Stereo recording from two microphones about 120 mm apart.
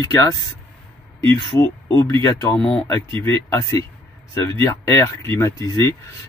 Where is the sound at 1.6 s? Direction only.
25° left (ahead or behind).